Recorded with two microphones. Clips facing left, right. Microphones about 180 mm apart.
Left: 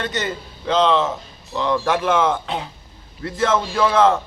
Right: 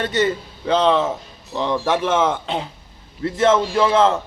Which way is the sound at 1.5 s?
20° right (ahead or behind).